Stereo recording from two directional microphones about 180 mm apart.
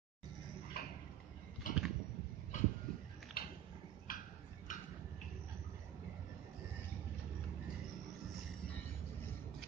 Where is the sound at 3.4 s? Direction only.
55° left (ahead or behind).